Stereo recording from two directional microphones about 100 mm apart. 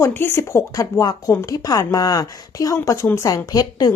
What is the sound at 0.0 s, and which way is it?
Speech, 20° left (ahead or behind).